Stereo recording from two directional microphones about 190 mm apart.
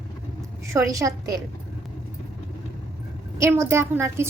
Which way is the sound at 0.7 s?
15° right (ahead or behind).